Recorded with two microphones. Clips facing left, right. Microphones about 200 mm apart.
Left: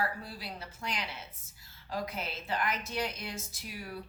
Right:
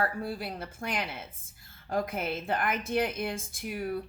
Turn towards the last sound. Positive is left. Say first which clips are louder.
# right 9 dB
turn(degrees=-55)  # may be behind; listen again after turning